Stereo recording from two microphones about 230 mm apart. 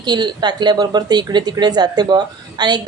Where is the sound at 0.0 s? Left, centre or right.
Centre.